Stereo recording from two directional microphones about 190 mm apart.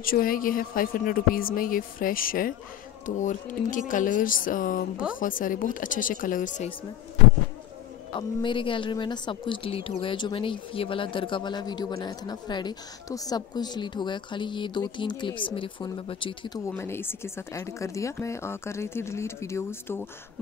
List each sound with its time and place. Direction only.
0.0 s speech: 50° left (ahead or behind)
8.2 s speech: 25° left (ahead or behind)